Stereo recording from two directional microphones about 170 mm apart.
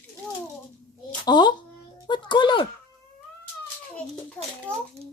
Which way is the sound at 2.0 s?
30° left (ahead or behind).